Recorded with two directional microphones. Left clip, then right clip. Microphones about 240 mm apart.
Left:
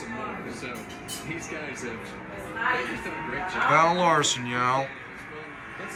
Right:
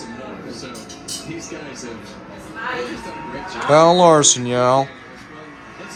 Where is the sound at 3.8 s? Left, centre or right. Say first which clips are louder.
Right 11 dB; centre.